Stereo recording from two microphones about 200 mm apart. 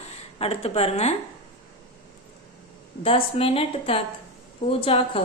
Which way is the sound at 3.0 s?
30° left (ahead or behind).